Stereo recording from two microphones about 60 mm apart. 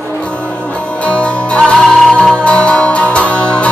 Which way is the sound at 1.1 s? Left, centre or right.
Centre.